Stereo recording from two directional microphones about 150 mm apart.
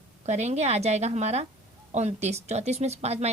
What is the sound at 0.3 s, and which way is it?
A woman's voice, 50° right (ahead or behind).